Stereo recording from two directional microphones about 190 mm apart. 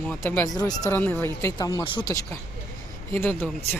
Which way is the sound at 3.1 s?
10° left (ahead or behind).